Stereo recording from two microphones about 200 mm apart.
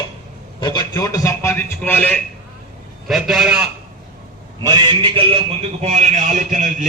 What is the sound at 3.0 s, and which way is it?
Speech, centre (ahead or behind).